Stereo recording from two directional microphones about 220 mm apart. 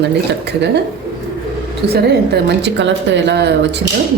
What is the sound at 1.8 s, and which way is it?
Speech, 50° right (ahead or behind).